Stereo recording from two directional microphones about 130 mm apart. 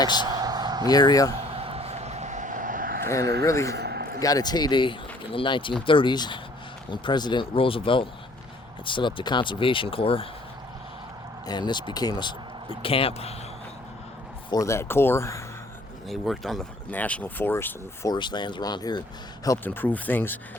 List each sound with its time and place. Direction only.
0.3 s a sound: 30° right (ahead or behind)
0.9 s speech: 30° left (ahead or behind)
1.5 s a sound: 50° right (ahead or behind); by 2.9 s 90° right
3.1 s speech: 25° left (ahead or behind); by 10.2 s 45° left (ahead or behind)
11.4 s speech: 35° left (ahead or behind)
12.8 s speech: 45° left (ahead or behind)
14.5 s speech: 25° left (ahead or behind)
16.0 s speech: centre (ahead or behind); by 18.1 s 15° left (ahead or behind)
18.1 s speech: 35° left (ahead or behind)
19.6 s speech: 15° left (ahead or behind)